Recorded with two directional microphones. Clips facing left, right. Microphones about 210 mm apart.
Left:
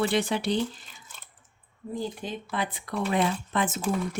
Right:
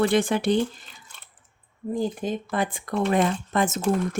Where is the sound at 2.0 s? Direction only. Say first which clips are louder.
Right 7 dB; 45° right (ahead or behind).